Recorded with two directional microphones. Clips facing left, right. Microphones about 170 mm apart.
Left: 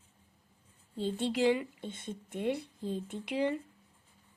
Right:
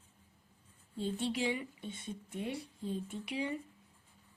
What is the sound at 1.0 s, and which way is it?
Speech, 90° left.